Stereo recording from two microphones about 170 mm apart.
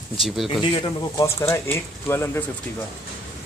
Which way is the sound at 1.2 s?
15° left (ahead or behind).